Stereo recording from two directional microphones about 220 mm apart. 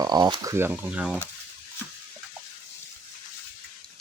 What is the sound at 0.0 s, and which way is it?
Speech, 20° right (ahead or behind).